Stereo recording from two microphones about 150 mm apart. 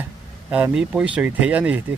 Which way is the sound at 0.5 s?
10° right (ahead or behind).